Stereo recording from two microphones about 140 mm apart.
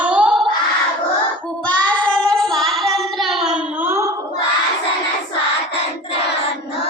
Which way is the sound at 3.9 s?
20° right (ahead or behind).